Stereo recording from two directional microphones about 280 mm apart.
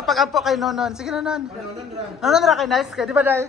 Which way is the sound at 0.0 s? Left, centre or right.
Centre.